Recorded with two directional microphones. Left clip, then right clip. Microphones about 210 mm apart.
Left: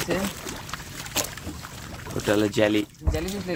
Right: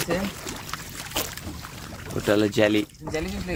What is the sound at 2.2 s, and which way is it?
Speech, 15° right (ahead or behind).